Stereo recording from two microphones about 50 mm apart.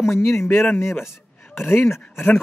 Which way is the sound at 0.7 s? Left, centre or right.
Left.